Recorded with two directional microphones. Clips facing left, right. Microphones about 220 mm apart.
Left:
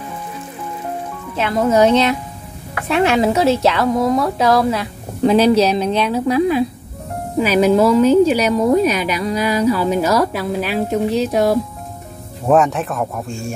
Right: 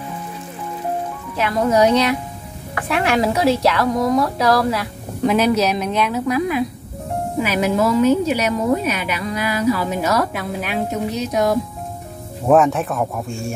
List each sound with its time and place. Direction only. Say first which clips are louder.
1.3 s a woman's voice: left 2 dB; 25° left (ahead or behind)
12.4 s speech: even; centre (ahead or behind)